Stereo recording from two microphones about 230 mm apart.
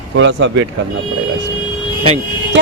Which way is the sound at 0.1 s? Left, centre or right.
Right.